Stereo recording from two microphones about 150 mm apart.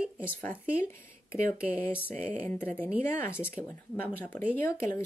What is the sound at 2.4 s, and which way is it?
Speech, 15° left (ahead or behind).